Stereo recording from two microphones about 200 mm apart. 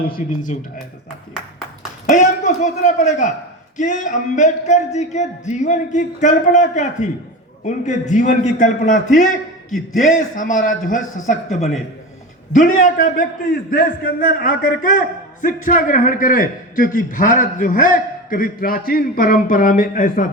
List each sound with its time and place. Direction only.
0.2 s speech: 40° left (ahead or behind)
2.0 s speech: 40° left (ahead or behind)
10.0 s speech: 40° left (ahead or behind)
12.5 s a man's voice: 40° left (ahead or behind)